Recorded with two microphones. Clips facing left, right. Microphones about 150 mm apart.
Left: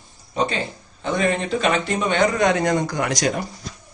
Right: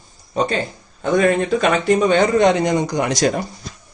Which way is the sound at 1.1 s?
45° right (ahead or behind).